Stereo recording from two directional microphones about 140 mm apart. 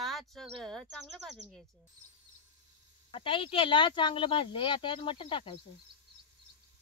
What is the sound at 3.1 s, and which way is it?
Speech, 40° left (ahead or behind).